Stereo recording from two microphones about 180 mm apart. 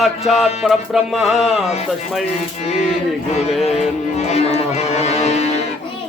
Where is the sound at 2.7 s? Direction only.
35° left (ahead or behind).